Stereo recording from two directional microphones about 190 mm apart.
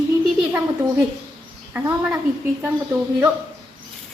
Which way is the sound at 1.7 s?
10° right (ahead or behind).